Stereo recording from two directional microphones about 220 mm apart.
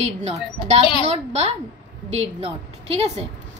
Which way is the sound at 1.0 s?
30° right (ahead or behind).